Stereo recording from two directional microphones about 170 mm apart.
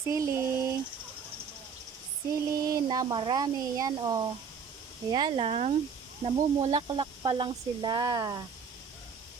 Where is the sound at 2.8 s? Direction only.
25° right (ahead or behind).